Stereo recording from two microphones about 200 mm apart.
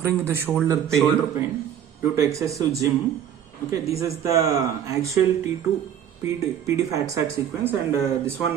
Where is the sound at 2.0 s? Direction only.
15° right (ahead or behind).